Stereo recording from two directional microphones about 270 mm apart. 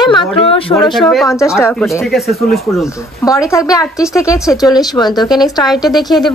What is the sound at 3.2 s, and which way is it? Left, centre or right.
A woman's voice, centre.